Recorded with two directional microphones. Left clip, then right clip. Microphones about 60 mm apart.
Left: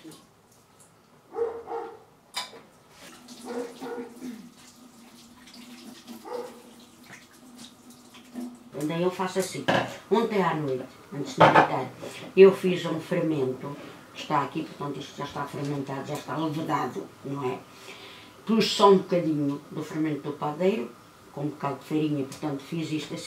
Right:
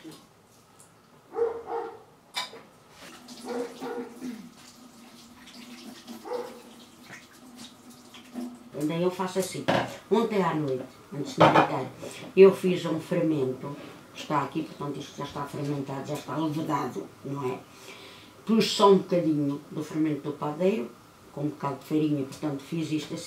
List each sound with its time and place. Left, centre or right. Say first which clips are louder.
1.3 s dog: right 2 dB; centre
3.4 s bathtub: right 1 dB; centre
6.0 s dog: right 2 dB; centre
8.3 s a sound: even; centre
8.8 s speech: left 1 dB; centre
17.3 s a sound: left 1 dB; centre
19.0 s speech: even; centre